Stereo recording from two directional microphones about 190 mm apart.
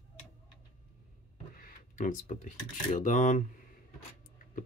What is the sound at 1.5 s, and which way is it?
Speech, 40° left (ahead or behind).